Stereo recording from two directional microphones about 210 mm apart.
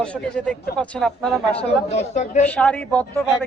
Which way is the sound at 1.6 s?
30° left (ahead or behind).